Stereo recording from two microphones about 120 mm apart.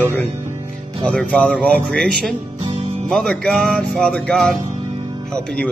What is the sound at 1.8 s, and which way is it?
Music, 5° left (ahead or behind).